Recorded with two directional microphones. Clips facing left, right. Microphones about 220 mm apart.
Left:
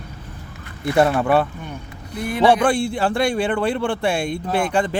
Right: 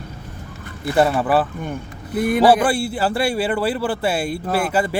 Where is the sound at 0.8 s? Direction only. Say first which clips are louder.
Left 1 dB; 5° right (ahead or behind).